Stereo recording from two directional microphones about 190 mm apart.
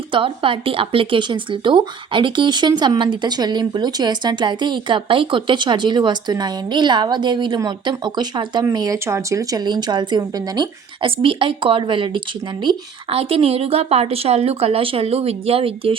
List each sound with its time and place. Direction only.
0.1 s a woman's voice: 25° right (ahead or behind)